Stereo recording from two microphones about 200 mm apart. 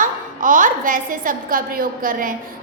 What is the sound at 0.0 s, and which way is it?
A woman's voice, 40° right (ahead or behind).